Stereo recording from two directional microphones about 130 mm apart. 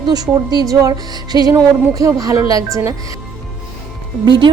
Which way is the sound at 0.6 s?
25° right (ahead or behind).